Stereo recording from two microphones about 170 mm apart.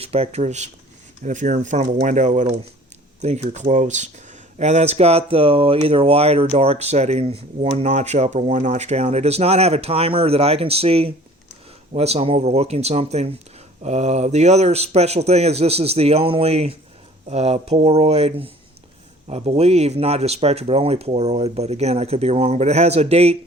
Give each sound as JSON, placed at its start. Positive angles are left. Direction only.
{"t": 0.0, "sound": "speech", "side_deg": -35}